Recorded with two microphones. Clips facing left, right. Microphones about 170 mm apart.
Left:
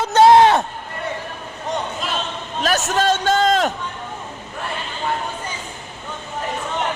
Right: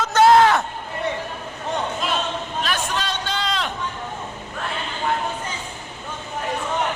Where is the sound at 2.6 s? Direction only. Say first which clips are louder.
Left 11 dB; 45° left (ahead or behind).